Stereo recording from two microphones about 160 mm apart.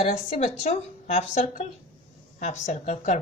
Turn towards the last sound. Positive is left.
turn(degrees=50)  # may be behind; listen again after turning